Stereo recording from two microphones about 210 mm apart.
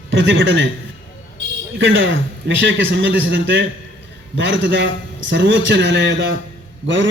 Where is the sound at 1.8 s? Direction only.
60° right (ahead or behind).